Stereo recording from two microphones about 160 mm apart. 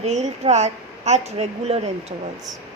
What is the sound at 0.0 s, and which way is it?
Speech, 40° right (ahead or behind).